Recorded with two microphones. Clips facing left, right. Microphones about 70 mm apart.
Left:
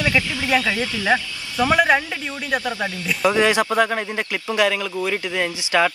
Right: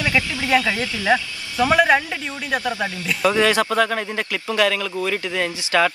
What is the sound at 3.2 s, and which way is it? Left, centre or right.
A man's voice, centre.